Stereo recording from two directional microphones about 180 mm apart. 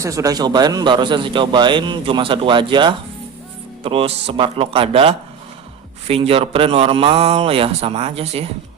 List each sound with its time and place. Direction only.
0.0 s a man's voice: 20° right (ahead or behind); by 8.4 s 35° right (ahead or behind)